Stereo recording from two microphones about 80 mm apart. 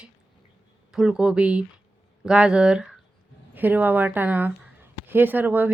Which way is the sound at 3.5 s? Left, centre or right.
Right.